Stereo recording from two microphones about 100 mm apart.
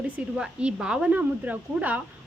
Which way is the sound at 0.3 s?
10° right (ahead or behind).